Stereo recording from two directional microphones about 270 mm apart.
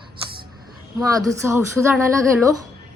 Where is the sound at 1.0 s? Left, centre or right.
Centre.